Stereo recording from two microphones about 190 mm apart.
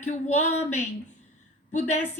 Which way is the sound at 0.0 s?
40° left (ahead or behind).